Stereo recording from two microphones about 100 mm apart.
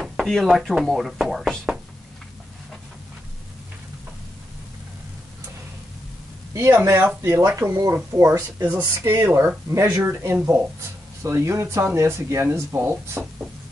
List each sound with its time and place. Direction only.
0.0 s speech: centre (ahead or behind)
6.5 s speech: 30° right (ahead or behind)